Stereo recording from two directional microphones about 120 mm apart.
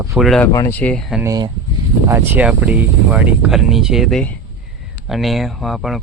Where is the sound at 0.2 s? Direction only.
Centre (ahead or behind).